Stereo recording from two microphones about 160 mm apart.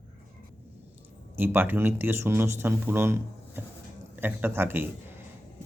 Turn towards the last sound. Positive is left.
turn(degrees=-15)  # may be behind; listen again after turning